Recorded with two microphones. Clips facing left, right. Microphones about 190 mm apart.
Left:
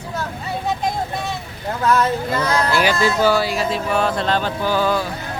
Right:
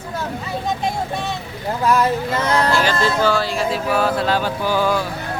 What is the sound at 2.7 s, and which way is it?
Speech, 10° left (ahead or behind).